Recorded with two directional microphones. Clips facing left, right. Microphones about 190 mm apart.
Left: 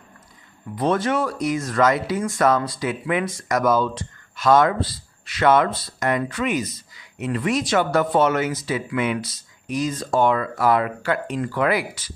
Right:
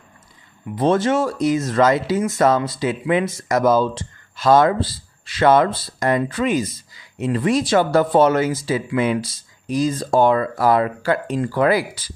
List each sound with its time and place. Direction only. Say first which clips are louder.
0.7 s speech: right 4 dB; 25° right (ahead or behind)